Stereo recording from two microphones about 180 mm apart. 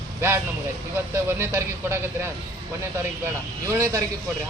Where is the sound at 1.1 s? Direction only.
15° right (ahead or behind).